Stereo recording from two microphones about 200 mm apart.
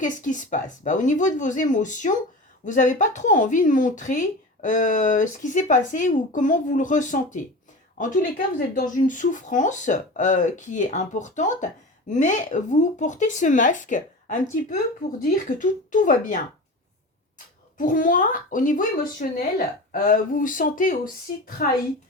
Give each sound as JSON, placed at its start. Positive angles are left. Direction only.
{"t": 0.0, "sound": "speech", "side_deg": 40}